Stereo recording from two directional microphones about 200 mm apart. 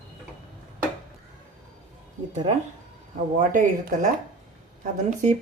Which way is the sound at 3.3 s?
40° right (ahead or behind).